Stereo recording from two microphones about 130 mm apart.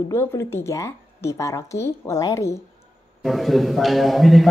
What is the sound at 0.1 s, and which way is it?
A woman's voice, 20° left (ahead or behind).